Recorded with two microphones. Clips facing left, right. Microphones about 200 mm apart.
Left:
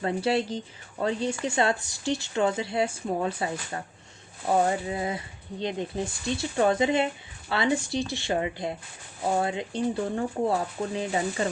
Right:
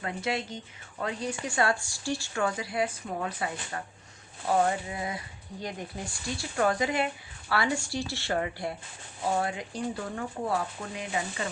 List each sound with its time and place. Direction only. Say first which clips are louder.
0.0 s speech: left 7 dB; 30° left (ahead or behind)